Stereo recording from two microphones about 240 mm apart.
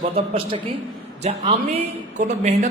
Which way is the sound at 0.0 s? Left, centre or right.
Right.